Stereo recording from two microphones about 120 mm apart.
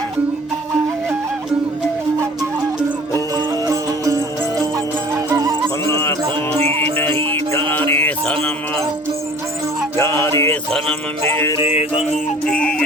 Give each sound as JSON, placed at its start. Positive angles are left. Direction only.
{"t": 3.1, "sound": "music", "side_deg": -30}
{"t": 5.1, "sound": "music", "side_deg": -25}
{"t": 5.8, "sound": "music", "side_deg": 25}
{"t": 6.6, "sound": "music", "side_deg": -55}
{"t": 10.0, "sound": "music", "side_deg": 20}
{"t": 10.7, "sound": "music", "side_deg": 5}
{"t": 11.6, "sound": "music", "side_deg": 60}
{"t": 12.5, "sound": "music", "side_deg": 10}